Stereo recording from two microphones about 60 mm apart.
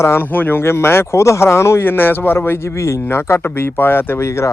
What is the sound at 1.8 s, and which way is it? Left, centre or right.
Speech, left.